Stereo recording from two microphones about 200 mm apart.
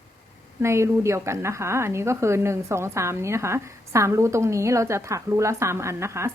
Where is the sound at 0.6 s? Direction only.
15° right (ahead or behind).